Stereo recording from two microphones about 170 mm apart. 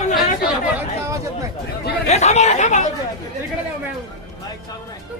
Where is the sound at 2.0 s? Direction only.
40° left (ahead or behind).